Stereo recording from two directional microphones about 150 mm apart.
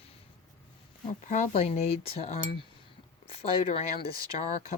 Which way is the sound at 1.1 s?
55° left (ahead or behind).